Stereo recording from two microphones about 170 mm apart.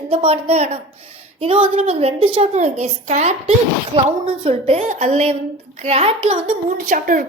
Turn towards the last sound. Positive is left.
turn(degrees=-50)  # may be behind; listen again after turning